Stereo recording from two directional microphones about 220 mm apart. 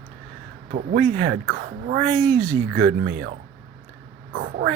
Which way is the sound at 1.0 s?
65° right (ahead or behind).